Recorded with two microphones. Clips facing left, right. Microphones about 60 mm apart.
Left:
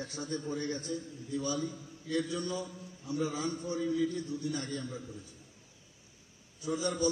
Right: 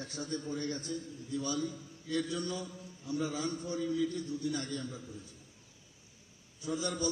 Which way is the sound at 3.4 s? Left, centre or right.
Centre.